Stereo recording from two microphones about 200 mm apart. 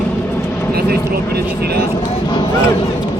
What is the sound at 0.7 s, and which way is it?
Speech, 50° right (ahead or behind).